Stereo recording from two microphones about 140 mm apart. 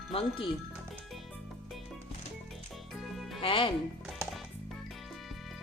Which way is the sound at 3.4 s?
40° left (ahead or behind).